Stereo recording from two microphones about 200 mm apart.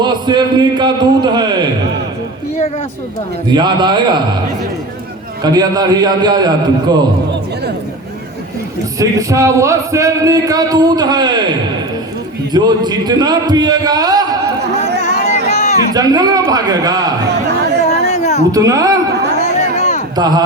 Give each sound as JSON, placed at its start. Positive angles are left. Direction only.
{"t": 0.0, "sound": "music", "side_deg": -20}
{"t": 3.5, "sound": "music", "side_deg": -20}
{"t": 5.4, "sound": "music", "side_deg": -20}
{"t": 9.0, "sound": "music", "side_deg": -15}
{"t": 12.5, "sound": "music", "side_deg": -20}
{"t": 15.0, "sound": "a sound", "side_deg": 35}
{"t": 15.9, "sound": "music", "side_deg": -20}
{"t": 18.1, "sound": "a sound", "side_deg": 35}
{"t": 18.5, "sound": "music", "side_deg": -15}
{"t": 19.5, "sound": "a sound", "side_deg": 35}
{"t": 20.1, "sound": "music", "side_deg": -20}